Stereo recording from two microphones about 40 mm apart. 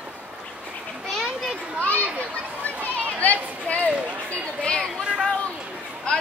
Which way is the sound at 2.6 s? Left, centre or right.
Left.